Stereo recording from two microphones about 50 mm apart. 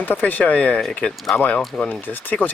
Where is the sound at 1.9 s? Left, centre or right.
Left.